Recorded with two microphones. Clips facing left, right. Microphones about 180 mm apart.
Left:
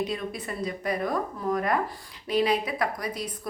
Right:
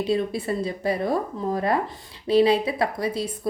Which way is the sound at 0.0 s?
30° right (ahead or behind).